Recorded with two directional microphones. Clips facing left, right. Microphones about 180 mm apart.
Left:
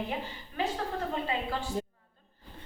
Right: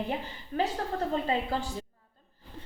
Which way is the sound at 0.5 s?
40° right (ahead or behind).